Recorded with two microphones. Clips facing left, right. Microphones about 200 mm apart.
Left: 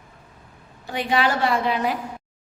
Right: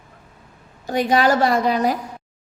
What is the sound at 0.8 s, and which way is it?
A woman's voice, 40° right (ahead or behind).